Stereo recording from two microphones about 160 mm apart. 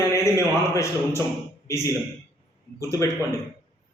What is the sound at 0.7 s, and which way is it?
A man's voice, 15° left (ahead or behind).